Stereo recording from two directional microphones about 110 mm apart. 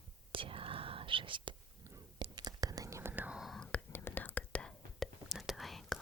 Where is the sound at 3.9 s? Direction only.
15° left (ahead or behind).